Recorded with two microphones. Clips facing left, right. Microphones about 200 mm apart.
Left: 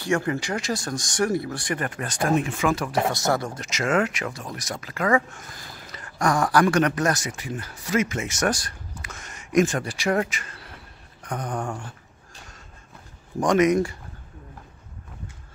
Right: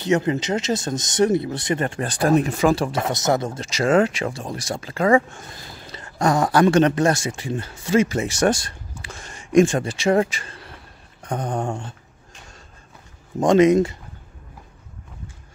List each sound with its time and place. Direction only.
0.0 s speech: 20° right (ahead or behind)
13.4 s speech: 25° right (ahead or behind)